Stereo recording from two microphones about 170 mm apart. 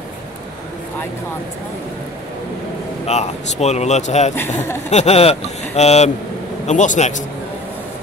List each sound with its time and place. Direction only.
3.1 s a man's voice: 40° left (ahead or behind)